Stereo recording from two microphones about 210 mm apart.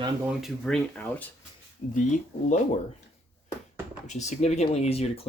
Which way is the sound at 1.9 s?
35° left (ahead or behind).